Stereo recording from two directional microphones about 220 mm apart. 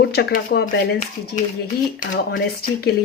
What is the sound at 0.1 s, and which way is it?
Speech, 45° left (ahead or behind).